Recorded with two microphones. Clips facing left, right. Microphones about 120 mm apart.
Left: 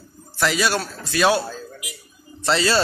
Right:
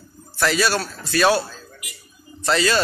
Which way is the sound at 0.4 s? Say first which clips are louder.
Right 1 dB; 15° left (ahead or behind).